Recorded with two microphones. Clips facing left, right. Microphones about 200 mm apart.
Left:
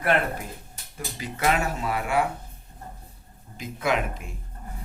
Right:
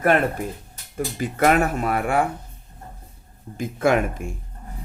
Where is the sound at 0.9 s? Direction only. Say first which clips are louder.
Right 10 dB; 50° right (ahead or behind).